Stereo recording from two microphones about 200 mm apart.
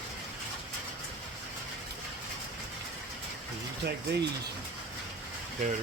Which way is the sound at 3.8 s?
55° right (ahead or behind).